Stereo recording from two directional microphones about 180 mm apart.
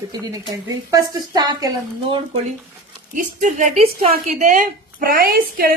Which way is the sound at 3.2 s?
45° right (ahead or behind).